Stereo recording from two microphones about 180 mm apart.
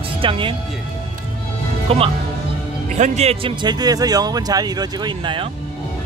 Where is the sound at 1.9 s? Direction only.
35° right (ahead or behind).